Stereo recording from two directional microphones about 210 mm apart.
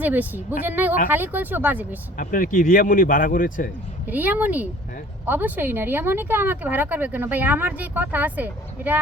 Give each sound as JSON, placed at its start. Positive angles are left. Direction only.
{"t": 0.0, "sound": "speech", "side_deg": -10}
{"t": 2.1, "sound": "speech", "side_deg": 40}
{"t": 4.0, "sound": "speech", "side_deg": -10}